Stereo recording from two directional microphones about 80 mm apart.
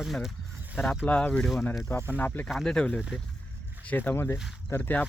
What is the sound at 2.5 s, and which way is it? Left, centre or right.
Speech, centre.